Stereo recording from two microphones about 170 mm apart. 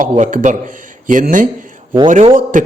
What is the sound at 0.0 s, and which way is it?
A man's voice, 50° right (ahead or behind).